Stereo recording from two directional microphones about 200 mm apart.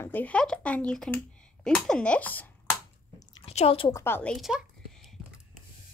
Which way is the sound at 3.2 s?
25° left (ahead or behind).